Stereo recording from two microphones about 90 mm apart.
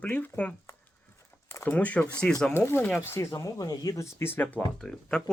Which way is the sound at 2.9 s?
25° left (ahead or behind).